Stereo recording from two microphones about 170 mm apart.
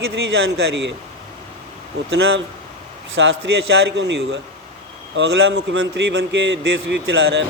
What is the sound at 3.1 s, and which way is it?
Speech, 90° right.